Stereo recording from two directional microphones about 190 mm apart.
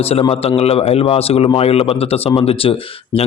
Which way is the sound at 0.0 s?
30° left (ahead or behind).